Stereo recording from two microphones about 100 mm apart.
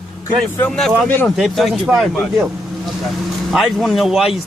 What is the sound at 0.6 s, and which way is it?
Speech, 5° left (ahead or behind).